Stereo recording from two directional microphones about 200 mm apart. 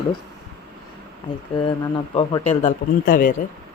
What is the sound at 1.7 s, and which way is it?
Speech, 25° left (ahead or behind).